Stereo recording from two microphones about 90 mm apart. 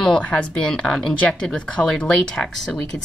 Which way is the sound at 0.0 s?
10° left (ahead or behind).